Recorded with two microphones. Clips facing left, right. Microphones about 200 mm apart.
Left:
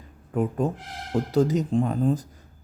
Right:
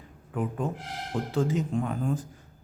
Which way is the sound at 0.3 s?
40° left (ahead or behind).